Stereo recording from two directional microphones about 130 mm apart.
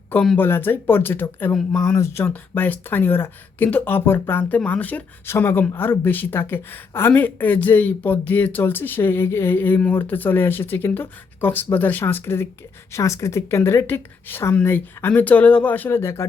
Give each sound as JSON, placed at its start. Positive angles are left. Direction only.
{"t": 0.1, "sound": "speech", "side_deg": 10}